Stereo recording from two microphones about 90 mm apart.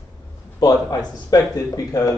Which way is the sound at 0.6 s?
45° left (ahead or behind).